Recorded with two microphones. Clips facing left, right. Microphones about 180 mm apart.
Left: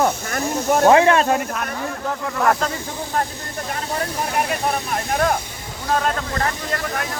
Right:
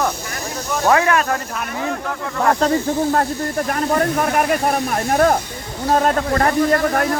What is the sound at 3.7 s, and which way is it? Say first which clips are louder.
Speech: right 6 dB; 55° right (ahead or behind).